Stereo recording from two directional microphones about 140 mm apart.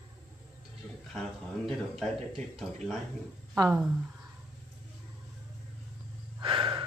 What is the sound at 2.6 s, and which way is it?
Speech, centre (ahead or behind).